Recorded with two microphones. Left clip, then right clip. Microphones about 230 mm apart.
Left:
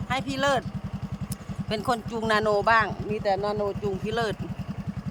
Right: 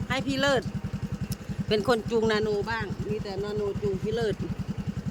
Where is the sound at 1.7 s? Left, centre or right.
Centre.